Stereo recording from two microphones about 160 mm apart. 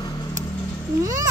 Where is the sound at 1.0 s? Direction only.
20° right (ahead or behind).